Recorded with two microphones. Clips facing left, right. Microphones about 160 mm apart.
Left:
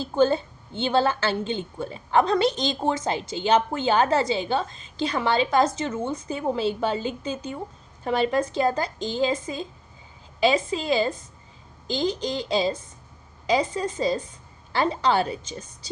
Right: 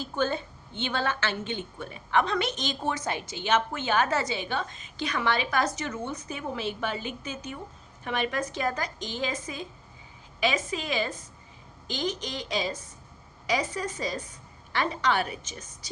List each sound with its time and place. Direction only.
0.0 s a woman's voice: 30° left (ahead or behind)